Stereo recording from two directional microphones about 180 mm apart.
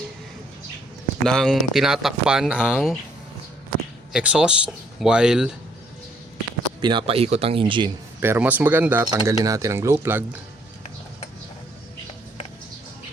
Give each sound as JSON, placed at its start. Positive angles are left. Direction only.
{"t": 1.2, "sound": "speech", "side_deg": 5}
{"t": 4.1, "sound": "speech", "side_deg": -5}
{"t": 6.8, "sound": "speech", "side_deg": -30}
{"t": 8.2, "sound": "speech", "side_deg": -10}